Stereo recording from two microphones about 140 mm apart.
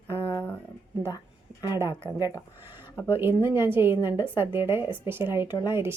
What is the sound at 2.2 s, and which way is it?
Speech, 25° left (ahead or behind).